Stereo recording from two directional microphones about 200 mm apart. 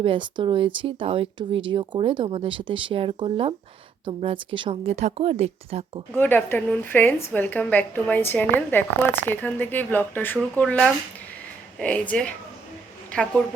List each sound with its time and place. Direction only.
0.0 s speech: 25° right (ahead or behind)
6.1 s a woman's voice: 10° left (ahead or behind)